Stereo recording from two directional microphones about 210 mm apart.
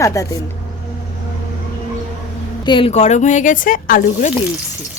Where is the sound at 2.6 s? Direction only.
25° left (ahead or behind).